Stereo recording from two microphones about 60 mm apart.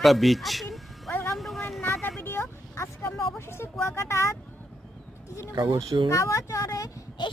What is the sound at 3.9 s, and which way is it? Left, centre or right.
Speech, left.